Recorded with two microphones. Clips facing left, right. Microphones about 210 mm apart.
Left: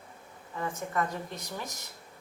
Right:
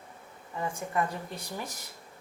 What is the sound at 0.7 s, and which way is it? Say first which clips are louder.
A woman's voice: right 1 dB; 10° right (ahead or behind).